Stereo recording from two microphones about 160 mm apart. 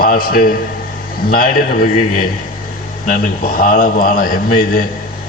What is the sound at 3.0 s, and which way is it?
A man's voice, 55° left (ahead or behind).